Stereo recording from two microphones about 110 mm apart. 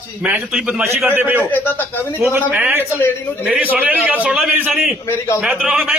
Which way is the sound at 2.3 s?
15° right (ahead or behind).